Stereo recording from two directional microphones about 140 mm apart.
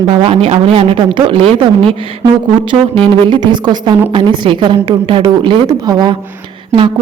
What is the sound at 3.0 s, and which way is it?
Speech, 35° right (ahead or behind).